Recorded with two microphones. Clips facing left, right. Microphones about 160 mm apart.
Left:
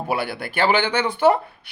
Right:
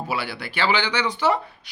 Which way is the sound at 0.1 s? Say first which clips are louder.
Left 7 dB; 50° left (ahead or behind).